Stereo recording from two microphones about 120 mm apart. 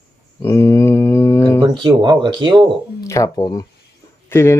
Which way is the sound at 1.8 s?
35° right (ahead or behind).